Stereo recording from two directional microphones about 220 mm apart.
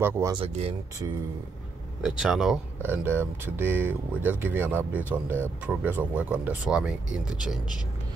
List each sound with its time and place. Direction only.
0.0 s speech: 15° right (ahead or behind)
2.0 s speech: centre (ahead or behind)